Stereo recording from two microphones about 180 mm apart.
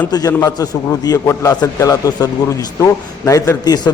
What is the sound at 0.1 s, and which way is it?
A man's voice, 20° left (ahead or behind).